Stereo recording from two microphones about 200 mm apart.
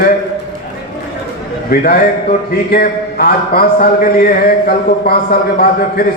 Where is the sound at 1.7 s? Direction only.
45° left (ahead or behind).